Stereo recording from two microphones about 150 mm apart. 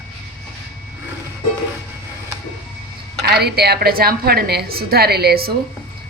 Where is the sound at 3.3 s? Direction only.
90° right.